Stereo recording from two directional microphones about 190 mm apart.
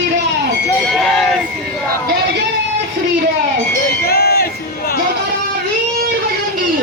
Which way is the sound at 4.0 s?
55° left (ahead or behind).